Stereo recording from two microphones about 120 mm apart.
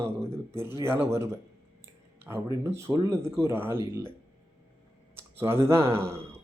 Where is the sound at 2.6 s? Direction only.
20° right (ahead or behind).